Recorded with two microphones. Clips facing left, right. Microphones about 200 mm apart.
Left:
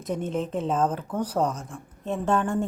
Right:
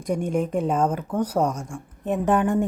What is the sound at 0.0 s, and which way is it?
A woman's voice, 10° right (ahead or behind).